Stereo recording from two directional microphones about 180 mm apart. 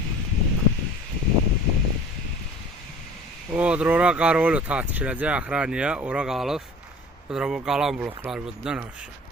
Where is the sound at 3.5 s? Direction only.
5° right (ahead or behind).